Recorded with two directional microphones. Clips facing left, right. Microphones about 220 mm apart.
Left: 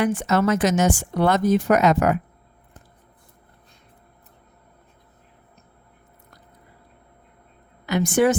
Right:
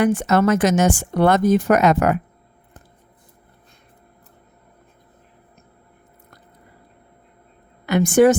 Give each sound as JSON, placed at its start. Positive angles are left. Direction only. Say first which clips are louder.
{"t": 0.0, "sound": "speech", "louder": "right 4 dB", "side_deg": -45}
{"t": 7.9, "sound": "speech", "louder": "right 5 dB", "side_deg": -50}